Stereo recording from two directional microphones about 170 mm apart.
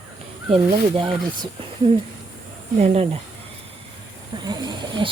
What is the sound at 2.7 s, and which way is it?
Speech, 40° right (ahead or behind).